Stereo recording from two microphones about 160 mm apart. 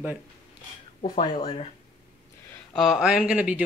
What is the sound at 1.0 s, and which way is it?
Speech, 30° left (ahead or behind).